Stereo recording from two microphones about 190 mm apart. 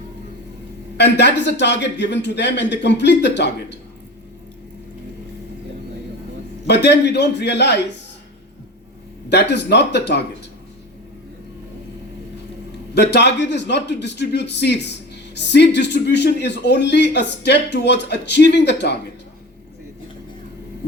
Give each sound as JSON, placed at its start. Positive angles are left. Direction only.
{"t": 0.9, "sound": "speech", "side_deg": 65}
{"t": 6.7, "sound": "speech", "side_deg": 65}
{"t": 9.3, "sound": "speech", "side_deg": 65}
{"t": 12.9, "sound": "speech", "side_deg": 60}